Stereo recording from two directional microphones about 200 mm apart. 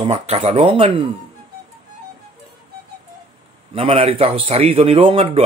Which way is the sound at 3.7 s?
30° right (ahead or behind).